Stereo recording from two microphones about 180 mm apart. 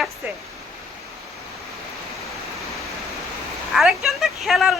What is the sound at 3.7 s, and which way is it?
Speech, centre (ahead or behind).